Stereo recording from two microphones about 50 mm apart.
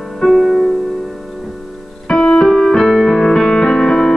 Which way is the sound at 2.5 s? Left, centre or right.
Centre.